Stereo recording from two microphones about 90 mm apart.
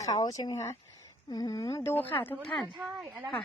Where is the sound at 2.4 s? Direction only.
5° left (ahead or behind).